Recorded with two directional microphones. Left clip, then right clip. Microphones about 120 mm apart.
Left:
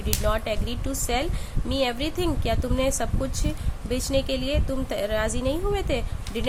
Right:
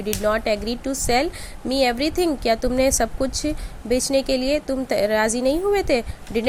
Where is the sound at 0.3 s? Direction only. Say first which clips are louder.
Right 6 dB; 45° right (ahead or behind).